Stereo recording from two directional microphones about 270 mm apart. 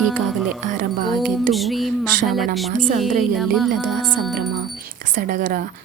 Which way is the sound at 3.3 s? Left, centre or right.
Centre.